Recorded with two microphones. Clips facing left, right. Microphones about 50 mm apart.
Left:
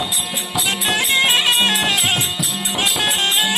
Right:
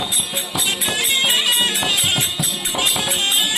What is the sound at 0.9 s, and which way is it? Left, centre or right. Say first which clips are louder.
Music: left 4 dB; left.